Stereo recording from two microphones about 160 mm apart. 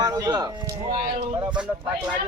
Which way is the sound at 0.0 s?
25° right (ahead or behind).